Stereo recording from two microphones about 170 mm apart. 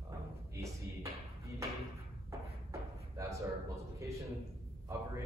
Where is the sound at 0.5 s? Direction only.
15° right (ahead or behind).